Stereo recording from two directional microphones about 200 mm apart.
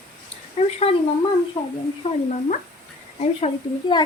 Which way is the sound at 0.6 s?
30° left (ahead or behind).